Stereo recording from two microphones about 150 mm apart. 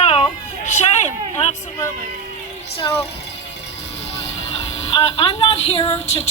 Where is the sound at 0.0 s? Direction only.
40° left (ahead or behind).